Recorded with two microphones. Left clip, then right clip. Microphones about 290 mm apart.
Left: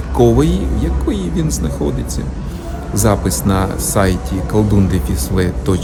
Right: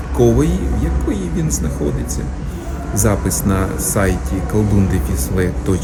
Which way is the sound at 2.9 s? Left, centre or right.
Centre.